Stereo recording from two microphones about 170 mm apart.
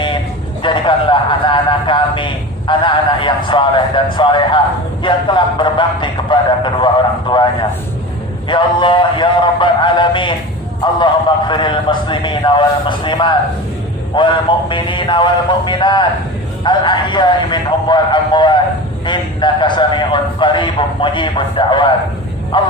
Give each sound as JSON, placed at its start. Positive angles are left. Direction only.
{"t": 0.6, "sound": "a man's voice", "side_deg": 30}
{"t": 8.4, "sound": "a man's voice", "side_deg": 30}